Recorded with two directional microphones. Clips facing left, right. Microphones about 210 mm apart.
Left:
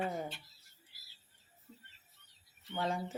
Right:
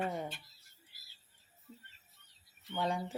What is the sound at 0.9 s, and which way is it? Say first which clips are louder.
Bird: even; 50° right (ahead or behind).